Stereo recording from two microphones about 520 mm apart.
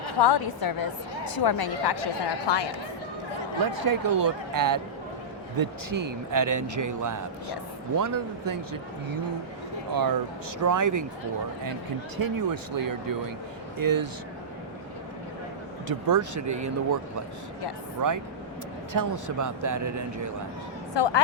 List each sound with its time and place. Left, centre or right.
0.2 s a woman's voice: left
3.8 s a man's voice: right
12.1 s a man's voice: right
15.9 s a man's voice: right
18.9 s a man's voice: right
20.9 s a woman's voice: left